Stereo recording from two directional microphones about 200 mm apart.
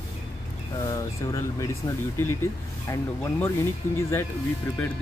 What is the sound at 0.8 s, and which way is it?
Speech, 15° left (ahead or behind).